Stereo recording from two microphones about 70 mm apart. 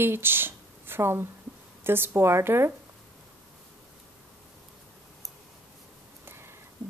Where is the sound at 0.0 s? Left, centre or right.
Right.